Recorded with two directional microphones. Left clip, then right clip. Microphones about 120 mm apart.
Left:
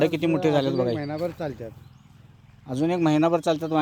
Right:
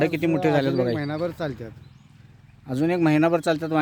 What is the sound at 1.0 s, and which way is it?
Speech, 50° right (ahead or behind).